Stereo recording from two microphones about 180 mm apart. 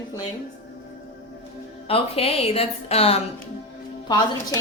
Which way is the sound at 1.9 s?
35° left (ahead or behind).